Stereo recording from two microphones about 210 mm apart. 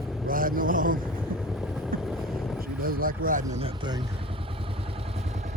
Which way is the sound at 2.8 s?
45° right (ahead or behind).